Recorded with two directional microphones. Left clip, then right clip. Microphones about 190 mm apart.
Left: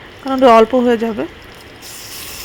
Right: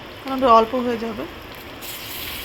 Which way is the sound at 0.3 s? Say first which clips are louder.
Left 6 dB; 30° left (ahead or behind).